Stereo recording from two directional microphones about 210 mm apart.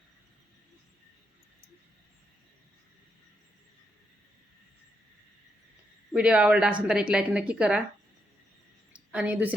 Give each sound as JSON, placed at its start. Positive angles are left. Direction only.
{"t": 6.1, "sound": "speech", "side_deg": -5}
{"t": 9.1, "sound": "a woman's voice", "side_deg": -5}